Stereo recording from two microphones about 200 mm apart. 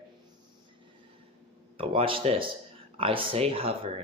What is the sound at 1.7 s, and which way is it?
Speech, 30° right (ahead or behind).